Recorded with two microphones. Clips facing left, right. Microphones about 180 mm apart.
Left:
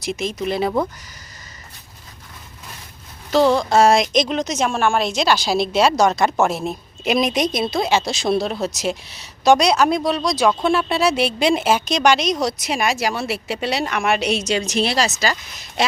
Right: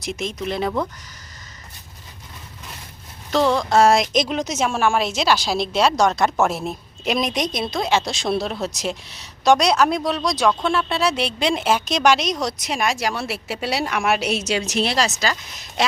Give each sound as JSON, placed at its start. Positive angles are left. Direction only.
{"t": 0.0, "sound": "a woman's voice", "side_deg": 0}
{"t": 3.3, "sound": "a woman's voice", "side_deg": 5}